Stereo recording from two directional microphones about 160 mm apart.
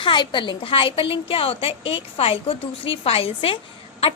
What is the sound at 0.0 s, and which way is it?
A woman's voice, 30° left (ahead or behind).